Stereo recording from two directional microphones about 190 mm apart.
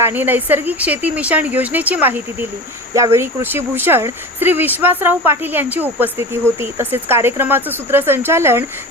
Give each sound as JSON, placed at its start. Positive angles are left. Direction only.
{"t": 0.0, "sound": "speech", "side_deg": -10}